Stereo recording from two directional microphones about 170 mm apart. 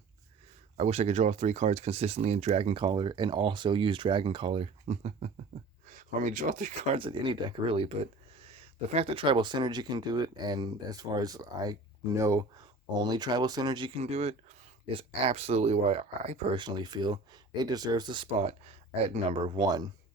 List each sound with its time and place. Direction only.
0.8 s speech: 40° right (ahead or behind)
6.9 s speech: 30° right (ahead or behind)
16.6 s speech: 25° right (ahead or behind)